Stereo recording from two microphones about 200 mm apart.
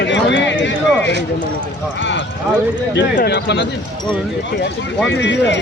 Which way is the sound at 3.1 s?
55° left (ahead or behind).